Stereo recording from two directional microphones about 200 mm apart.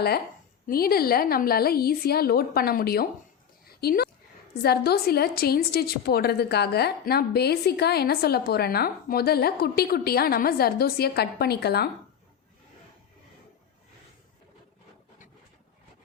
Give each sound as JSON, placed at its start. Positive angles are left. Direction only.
{"t": 0.7, "sound": "a woman's voice", "side_deg": 50}
{"t": 3.7, "sound": "a sound", "side_deg": 50}
{"t": 4.6, "sound": "a woman's voice", "side_deg": 55}